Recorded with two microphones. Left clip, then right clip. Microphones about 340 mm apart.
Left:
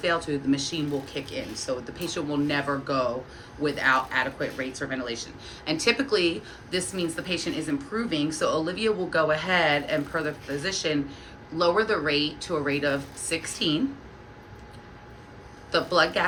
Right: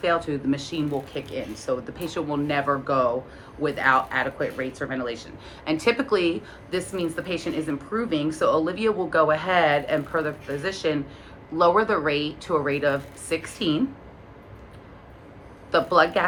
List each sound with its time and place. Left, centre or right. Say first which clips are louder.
0.0 s speech: right 2 dB; centre
15.7 s speech: right 3 dB; centre